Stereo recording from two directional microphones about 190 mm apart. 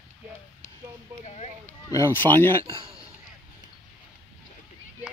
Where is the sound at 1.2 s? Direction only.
40° left (ahead or behind).